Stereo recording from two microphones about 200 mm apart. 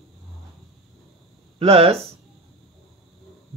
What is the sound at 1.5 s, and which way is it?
Speech, 30° right (ahead or behind).